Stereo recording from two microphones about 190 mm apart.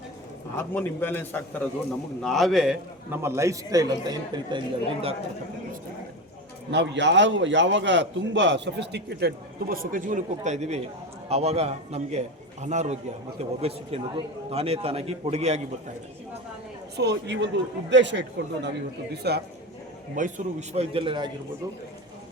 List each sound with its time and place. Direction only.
0.5 s a man's voice: 10° left (ahead or behind); by 4.6 s 20° right (ahead or behind)
6.7 s a man's voice: 65° right (ahead or behind); by 15.6 s 35° right (ahead or behind)
17.0 s speech: 65° right (ahead or behind)
20.1 s a man's voice: 40° right (ahead or behind)